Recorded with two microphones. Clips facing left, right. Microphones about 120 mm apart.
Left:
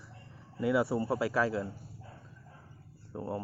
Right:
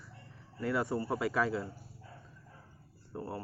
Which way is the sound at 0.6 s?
10° left (ahead or behind).